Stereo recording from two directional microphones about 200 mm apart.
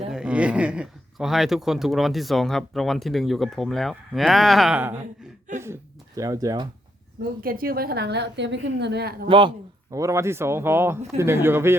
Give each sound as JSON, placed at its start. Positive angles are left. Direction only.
{"t": 0.1, "sound": "speech", "side_deg": -5}
{"t": 7.4, "sound": "a woman's voice", "side_deg": -45}
{"t": 9.2, "sound": "speech", "side_deg": -25}